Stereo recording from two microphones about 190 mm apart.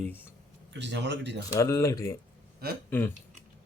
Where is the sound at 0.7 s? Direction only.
65° right (ahead or behind).